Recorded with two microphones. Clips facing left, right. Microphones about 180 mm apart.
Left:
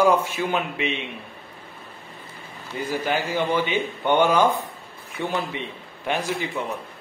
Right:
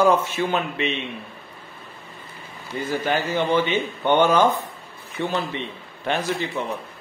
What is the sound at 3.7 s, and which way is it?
A man's voice, 10° left (ahead or behind).